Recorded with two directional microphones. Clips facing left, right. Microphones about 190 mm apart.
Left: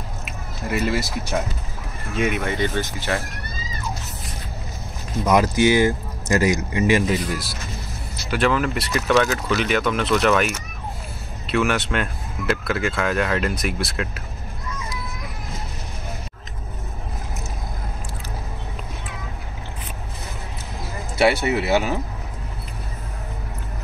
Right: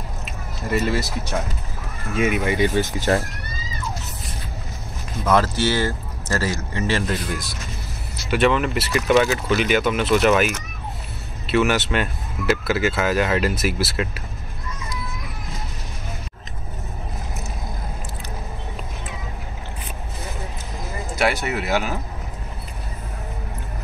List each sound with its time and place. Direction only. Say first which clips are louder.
0.2 s a sound: left 1 dB; 5° left (ahead or behind)
2.1 s speech: right 2 dB; centre (ahead or behind)
5.2 s speech: left 2 dB; 15° left (ahead or behind); by 14.2 s 5° right (ahead or behind)
21.5 s speech: left 3 dB; 25° left (ahead or behind)